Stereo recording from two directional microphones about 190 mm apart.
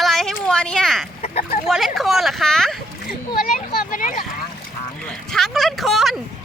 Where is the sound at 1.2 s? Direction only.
35° left (ahead or behind).